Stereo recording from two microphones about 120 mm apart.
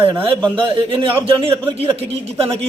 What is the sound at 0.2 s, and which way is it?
Speech, 45° right (ahead or behind).